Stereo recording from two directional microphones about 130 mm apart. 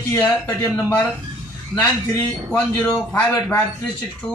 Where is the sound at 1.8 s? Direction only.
15° left (ahead or behind).